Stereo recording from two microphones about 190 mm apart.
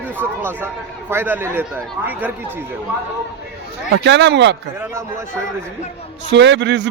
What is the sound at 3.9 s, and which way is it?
Speech, 70° right (ahead or behind).